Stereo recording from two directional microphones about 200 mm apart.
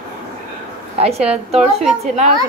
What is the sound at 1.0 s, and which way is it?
A woman's voice, 30° right (ahead or behind).